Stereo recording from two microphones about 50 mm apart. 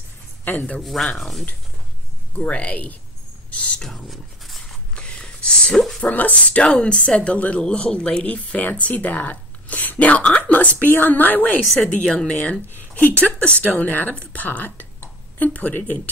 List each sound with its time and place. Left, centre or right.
0.7 s speech: centre
2.3 s speech: left
3.8 s a sound: centre
4.9 s a sound: centre
5.9 s speech: left
11.8 s speech: left
12.7 s speech: left
13.7 s speech: left